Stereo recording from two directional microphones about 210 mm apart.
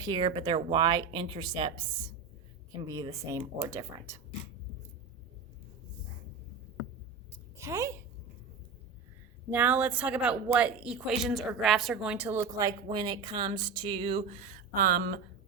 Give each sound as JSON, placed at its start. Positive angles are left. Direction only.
{"t": 0.0, "sound": "speech", "side_deg": -20}
{"t": 2.8, "sound": "speech", "side_deg": -15}
{"t": 7.6, "sound": "a woman's voice", "side_deg": -15}
{"t": 9.5, "sound": "speech", "side_deg": -10}